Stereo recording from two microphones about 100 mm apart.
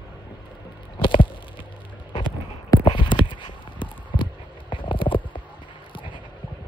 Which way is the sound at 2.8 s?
55° left (ahead or behind).